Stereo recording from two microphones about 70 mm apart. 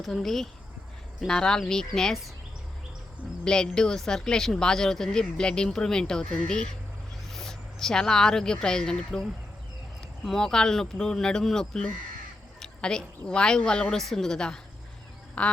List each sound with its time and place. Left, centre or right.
0.0 s speech: centre
3.4 s speech: centre
10.2 s a woman's voice: centre